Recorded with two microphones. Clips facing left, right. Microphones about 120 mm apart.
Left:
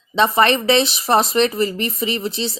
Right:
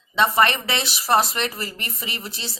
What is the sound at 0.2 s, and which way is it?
Speech, 25° left (ahead or behind).